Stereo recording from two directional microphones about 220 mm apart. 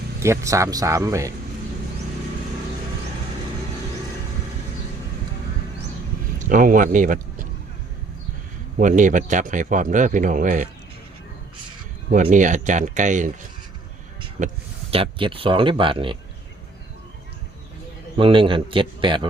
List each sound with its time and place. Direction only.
0.2 s speech: 15° right (ahead or behind)
6.4 s speech: 35° right (ahead or behind)
8.8 s speech: 35° right (ahead or behind)
12.1 s speech: 35° right (ahead or behind)
18.2 s a man's voice: 20° right (ahead or behind)